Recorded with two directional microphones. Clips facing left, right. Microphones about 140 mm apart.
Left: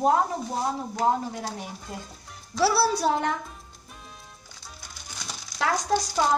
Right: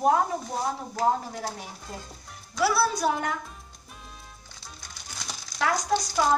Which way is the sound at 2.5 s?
30° left (ahead or behind).